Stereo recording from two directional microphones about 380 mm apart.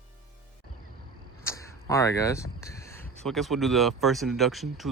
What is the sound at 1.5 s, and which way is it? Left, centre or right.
Speech, centre.